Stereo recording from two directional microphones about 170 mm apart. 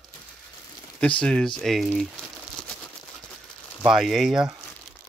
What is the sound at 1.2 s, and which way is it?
Speech, 5° left (ahead or behind).